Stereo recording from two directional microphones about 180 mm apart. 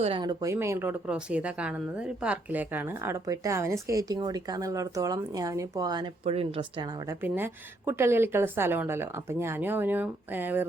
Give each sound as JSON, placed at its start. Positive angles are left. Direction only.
{"t": 0.0, "sound": "speech", "side_deg": -25}
{"t": 6.2, "sound": "speech", "side_deg": -30}
{"t": 7.2, "sound": "speech", "side_deg": -10}